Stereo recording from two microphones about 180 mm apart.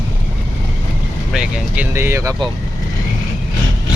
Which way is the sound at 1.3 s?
5° right (ahead or behind).